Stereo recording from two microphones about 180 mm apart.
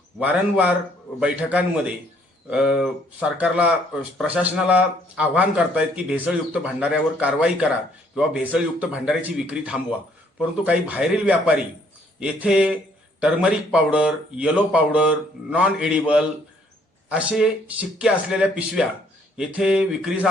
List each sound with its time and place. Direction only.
0.2 s a man's voice: 10° right (ahead or behind)